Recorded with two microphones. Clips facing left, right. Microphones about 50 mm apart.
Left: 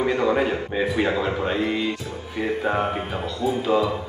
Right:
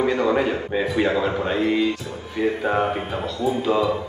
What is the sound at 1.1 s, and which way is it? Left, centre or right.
Speech, centre.